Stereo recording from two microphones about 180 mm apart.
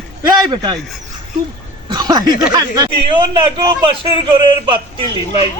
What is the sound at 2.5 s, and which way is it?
Speech, 25° right (ahead or behind).